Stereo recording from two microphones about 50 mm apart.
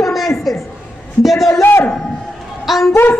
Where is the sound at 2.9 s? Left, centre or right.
Left.